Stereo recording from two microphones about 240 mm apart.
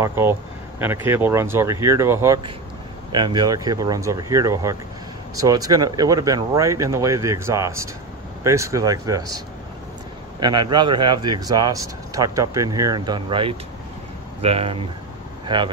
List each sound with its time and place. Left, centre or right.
0.0 s a man's voice: centre
10.4 s a man's voice: centre